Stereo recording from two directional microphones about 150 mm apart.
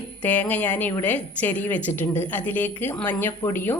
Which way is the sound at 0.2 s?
10° left (ahead or behind).